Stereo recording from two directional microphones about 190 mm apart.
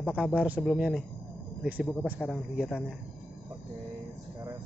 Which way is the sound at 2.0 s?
Centre (ahead or behind).